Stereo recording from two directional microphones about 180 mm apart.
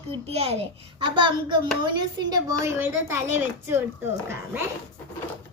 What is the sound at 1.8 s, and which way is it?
A child's voice, 25° right (ahead or behind).